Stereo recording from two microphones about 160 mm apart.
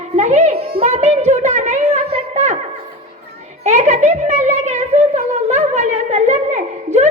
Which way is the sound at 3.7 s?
45° right (ahead or behind).